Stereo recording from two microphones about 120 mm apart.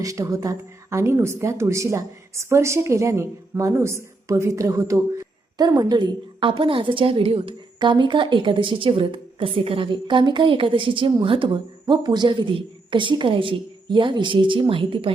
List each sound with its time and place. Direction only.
0.0 s a woman's voice: 25° right (ahead or behind); by 15.1 s 45° right (ahead or behind)